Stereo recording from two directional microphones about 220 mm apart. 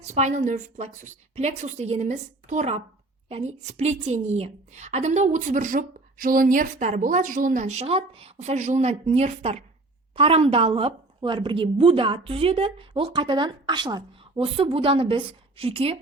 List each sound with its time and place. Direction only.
0.1 s a woman's voice: 35° right (ahead or behind)